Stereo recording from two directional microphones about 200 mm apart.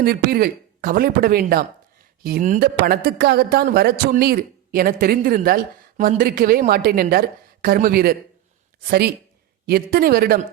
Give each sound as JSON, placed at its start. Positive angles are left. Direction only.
{"t": 0.0, "sound": "speech", "side_deg": -50}